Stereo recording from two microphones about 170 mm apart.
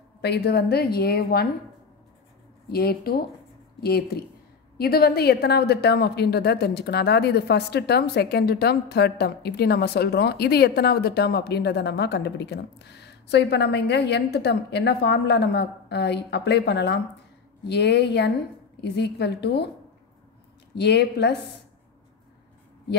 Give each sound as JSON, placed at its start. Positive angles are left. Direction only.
{"t": 0.2, "sound": "a woman's voice", "side_deg": 80}
{"t": 2.7, "sound": "a woman's voice", "side_deg": 65}
{"t": 20.7, "sound": "a woman's voice", "side_deg": 75}